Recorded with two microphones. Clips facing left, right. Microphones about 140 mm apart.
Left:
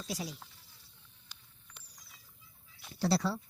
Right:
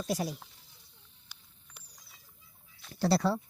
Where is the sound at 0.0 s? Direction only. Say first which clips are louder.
Right 7 dB; 50° right (ahead or behind).